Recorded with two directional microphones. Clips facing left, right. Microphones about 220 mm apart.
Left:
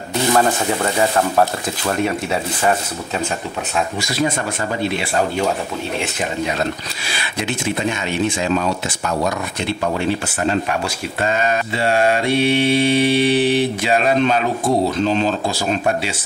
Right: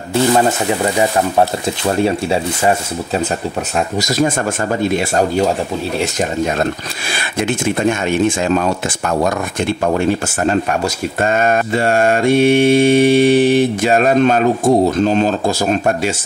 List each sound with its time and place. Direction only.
1.9 s speech: 30° right (ahead or behind)
3.7 s mantra: 40° right (ahead or behind)